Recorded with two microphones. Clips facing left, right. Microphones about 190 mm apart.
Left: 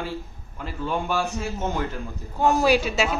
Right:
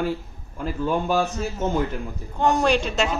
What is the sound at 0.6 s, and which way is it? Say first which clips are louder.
Speech: right 4 dB; 40° right (ahead or behind).